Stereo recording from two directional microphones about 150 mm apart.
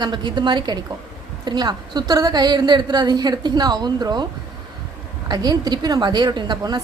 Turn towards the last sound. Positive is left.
turn(degrees=-25)  # may be behind; listen again after turning